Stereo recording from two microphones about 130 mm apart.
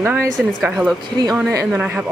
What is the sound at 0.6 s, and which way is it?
Speech, 5° right (ahead or behind).